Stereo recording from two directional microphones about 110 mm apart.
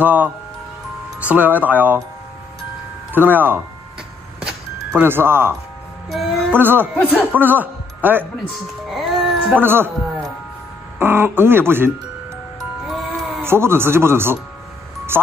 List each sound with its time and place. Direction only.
0.0 s speech: 15° right (ahead or behind)
3.1 s speech: 15° right (ahead or behind)
4.4 s music: 15° right (ahead or behind)
6.0 s music: centre (ahead or behind)
6.5 s speech: 20° right (ahead or behind)
7.0 s speech: 15° left (ahead or behind)
7.3 s a man's voice: 15° right (ahead or behind)
8.9 s music: centre (ahead or behind)
9.6 s speech: 20° right (ahead or behind)
11.0 s speech: 20° right (ahead or behind)
12.8 s music: centre (ahead or behind)
13.4 s speech: 20° right (ahead or behind)